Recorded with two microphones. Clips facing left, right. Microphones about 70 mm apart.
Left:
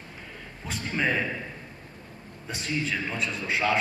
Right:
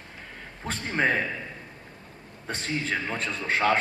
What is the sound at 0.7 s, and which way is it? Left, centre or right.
Speech, right.